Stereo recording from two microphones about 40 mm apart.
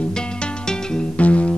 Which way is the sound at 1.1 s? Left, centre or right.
Left.